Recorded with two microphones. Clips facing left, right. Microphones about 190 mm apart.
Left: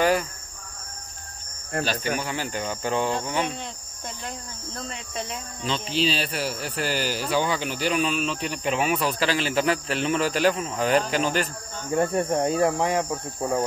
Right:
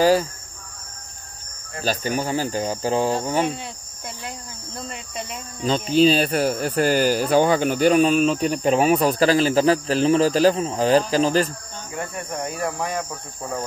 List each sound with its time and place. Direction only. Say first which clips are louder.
0.0 s speech: right 5 dB; 30° right (ahead or behind)
1.9 s speech: right 8 dB; 40° right (ahead or behind)
4.8 s cricket: even; centre (ahead or behind)
5.6 s speech: right 9 dB; 45° right (ahead or behind)
11.9 s cricket: left 8 dB; 35° left (ahead or behind); by 13.7 s 15° left (ahead or behind)